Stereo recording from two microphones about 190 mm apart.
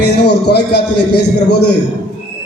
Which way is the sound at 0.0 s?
60° left (ahead or behind).